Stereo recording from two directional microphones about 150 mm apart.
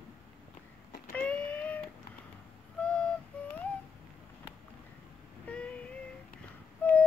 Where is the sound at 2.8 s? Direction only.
5° left (ahead or behind).